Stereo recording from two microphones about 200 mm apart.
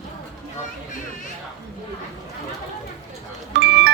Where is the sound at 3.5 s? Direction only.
65° right (ahead or behind).